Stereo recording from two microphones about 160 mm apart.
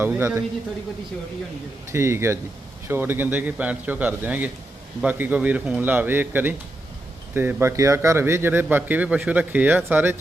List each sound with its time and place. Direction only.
0.0 s a man's voice: 15° right (ahead or behind)
1.9 s a man's voice: 15° right (ahead or behind)